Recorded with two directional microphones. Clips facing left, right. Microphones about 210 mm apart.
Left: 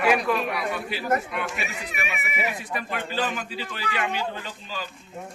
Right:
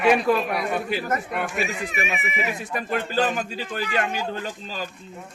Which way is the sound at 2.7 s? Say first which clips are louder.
Right 8 dB; 45° right (ahead or behind).